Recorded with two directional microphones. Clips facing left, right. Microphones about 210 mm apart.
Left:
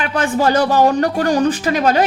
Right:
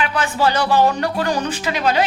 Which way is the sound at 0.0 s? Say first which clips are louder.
Left 3 dB; 45° left (ahead or behind).